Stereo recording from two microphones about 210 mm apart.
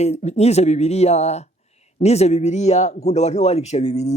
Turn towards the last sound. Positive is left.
turn(degrees=30)  # may be behind; listen again after turning